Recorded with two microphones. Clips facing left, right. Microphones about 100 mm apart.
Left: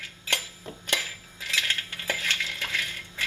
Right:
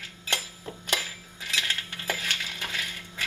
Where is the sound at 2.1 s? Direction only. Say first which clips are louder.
Left 1 dB; 15° right (ahead or behind).